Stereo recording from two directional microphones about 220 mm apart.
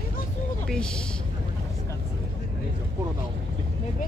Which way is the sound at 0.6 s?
5° left (ahead or behind).